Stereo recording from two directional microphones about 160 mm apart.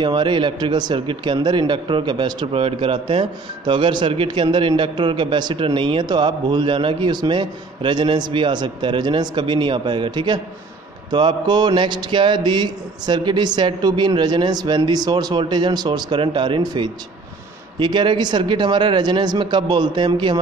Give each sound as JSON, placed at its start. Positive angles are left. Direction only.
{"t": 0.0, "sound": "a man's voice", "side_deg": -30}